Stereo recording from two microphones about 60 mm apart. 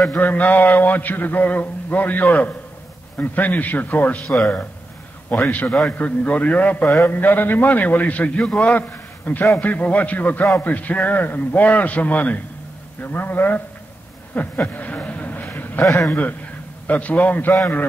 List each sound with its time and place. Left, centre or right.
0.2 s a man's voice: left
5.5 s a man's voice: left
14.3 s a sound: left
15.8 s a man's voice: left
16.1 s a man's voice: left